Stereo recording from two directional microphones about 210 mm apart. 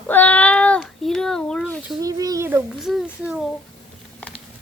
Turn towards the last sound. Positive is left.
turn(degrees=0)  # may be behind; listen again after turning